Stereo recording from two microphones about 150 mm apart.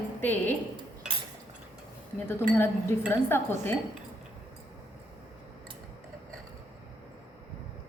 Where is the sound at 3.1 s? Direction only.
15° left (ahead or behind).